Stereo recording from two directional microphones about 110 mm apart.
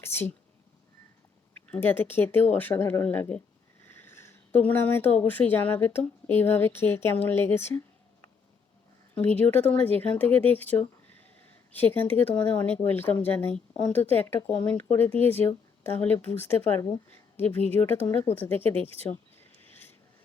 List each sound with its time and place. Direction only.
0.0 s speech: 20° left (ahead or behind)
1.7 s speech: 15° left (ahead or behind)
9.1 s speech: 15° left (ahead or behind)